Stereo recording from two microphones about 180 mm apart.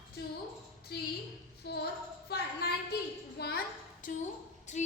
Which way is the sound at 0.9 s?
65° left (ahead or behind).